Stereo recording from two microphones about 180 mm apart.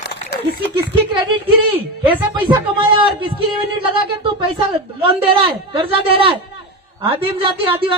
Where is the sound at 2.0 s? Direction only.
25° right (ahead or behind).